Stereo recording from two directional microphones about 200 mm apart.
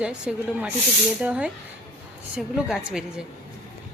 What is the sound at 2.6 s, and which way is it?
Speech, centre (ahead or behind).